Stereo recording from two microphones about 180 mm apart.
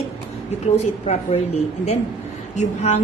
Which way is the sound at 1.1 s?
40° left (ahead or behind).